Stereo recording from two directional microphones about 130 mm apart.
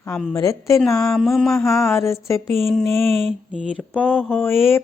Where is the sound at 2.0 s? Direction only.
20° left (ahead or behind).